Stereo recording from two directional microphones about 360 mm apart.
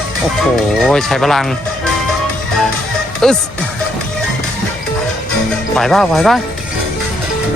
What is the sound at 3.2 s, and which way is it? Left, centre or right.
Speech, centre.